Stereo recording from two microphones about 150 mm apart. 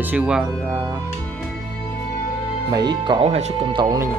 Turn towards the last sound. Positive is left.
turn(degrees=-35)  # may be behind; listen again after turning